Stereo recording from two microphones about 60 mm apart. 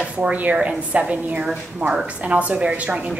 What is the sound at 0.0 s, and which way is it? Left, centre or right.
A woman's voice, right.